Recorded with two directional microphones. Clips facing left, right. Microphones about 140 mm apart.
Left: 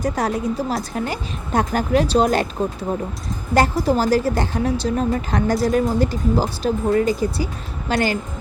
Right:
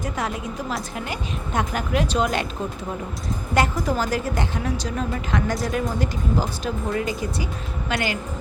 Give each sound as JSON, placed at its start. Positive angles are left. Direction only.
{"t": 0.0, "sound": "a woman's voice", "side_deg": 35}
{"t": 3.5, "sound": "a woman's voice", "side_deg": 30}